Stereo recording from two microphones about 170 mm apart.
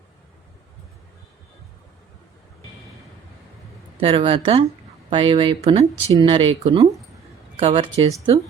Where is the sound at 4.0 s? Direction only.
30° right (ahead or behind).